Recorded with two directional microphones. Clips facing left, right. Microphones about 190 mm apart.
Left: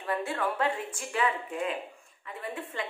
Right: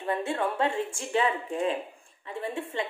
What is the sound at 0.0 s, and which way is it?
A woman's voice, 25° right (ahead or behind).